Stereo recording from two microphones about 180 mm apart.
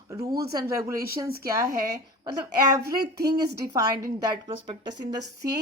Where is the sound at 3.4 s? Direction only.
20° right (ahead or behind).